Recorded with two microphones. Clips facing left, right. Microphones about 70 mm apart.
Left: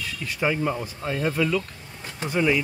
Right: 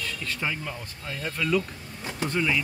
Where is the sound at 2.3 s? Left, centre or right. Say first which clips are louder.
Left 5 dB; centre.